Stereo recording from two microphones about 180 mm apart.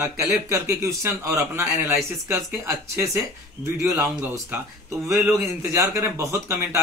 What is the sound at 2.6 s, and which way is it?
Speech, 15° right (ahead or behind).